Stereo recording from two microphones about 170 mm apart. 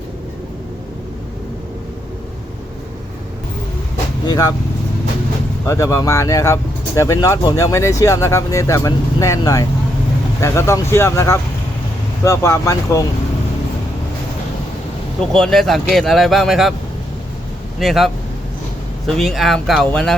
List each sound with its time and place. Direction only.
4.3 s speech: 20° left (ahead or behind)
5.6 s speech: 15° left (ahead or behind)
15.3 s speech: 5° left (ahead or behind)
17.7 s speech: centre (ahead or behind)